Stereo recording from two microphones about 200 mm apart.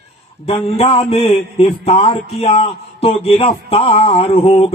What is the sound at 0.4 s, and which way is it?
Mantra, 30° left (ahead or behind).